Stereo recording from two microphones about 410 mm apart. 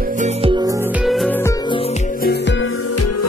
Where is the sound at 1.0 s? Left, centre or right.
Centre.